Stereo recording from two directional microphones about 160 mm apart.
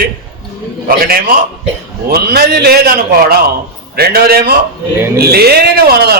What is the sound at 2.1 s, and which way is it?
A man's voice, 75° right (ahead or behind).